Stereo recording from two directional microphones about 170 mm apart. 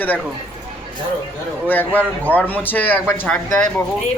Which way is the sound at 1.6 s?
10° left (ahead or behind).